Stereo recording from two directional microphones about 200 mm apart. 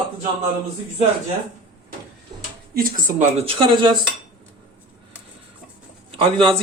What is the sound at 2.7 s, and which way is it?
Speech, 45° right (ahead or behind).